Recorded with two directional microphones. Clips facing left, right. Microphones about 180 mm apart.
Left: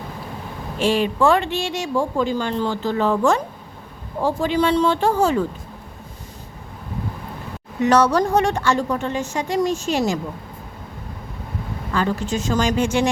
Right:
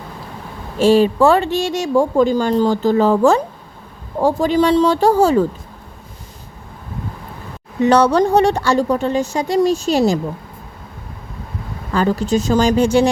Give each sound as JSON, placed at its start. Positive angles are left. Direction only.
{"t": 0.8, "sound": "speech", "side_deg": -40}
{"t": 7.8, "sound": "speech", "side_deg": -30}
{"t": 11.9, "sound": "speech", "side_deg": -35}